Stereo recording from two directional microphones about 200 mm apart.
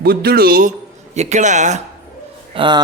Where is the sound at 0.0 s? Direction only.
50° right (ahead or behind).